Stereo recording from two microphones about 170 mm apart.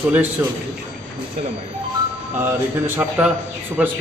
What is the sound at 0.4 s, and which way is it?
Speech, 10° right (ahead or behind).